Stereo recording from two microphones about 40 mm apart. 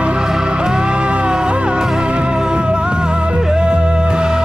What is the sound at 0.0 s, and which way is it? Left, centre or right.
Music, right.